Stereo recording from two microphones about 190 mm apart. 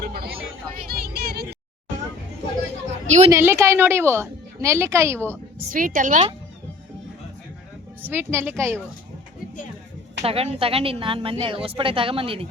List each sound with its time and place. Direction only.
0.0 s a sound: 55° right (ahead or behind)
3.2 s a woman's voice: 15° right (ahead or behind)
5.7 s a woman's voice: 45° right (ahead or behind)
8.0 s a woman's voice: 10° right (ahead or behind)
10.2 s a woman's voice: 30° right (ahead or behind)